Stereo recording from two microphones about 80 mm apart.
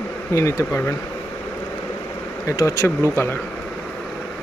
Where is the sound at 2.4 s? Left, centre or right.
Left.